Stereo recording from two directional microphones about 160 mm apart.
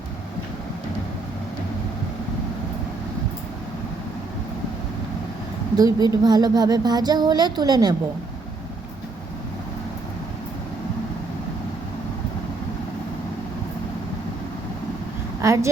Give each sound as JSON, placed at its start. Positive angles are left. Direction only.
{"t": 5.7, "sound": "a woman's voice", "side_deg": -25}
{"t": 15.4, "sound": "a woman's voice", "side_deg": -20}